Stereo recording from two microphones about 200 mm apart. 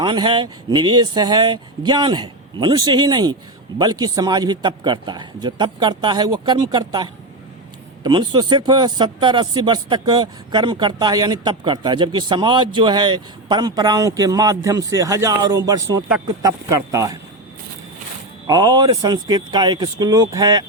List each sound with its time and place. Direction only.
0.0 s speech: 25° right (ahead or behind)
18.4 s speech: 20° right (ahead or behind)